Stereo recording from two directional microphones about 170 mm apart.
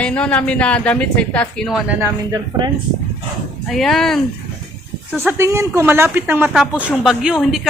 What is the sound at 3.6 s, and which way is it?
Speech, centre (ahead or behind).